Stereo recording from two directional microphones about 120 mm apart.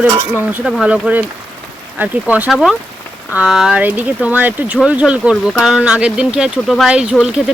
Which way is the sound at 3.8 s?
15° right (ahead or behind).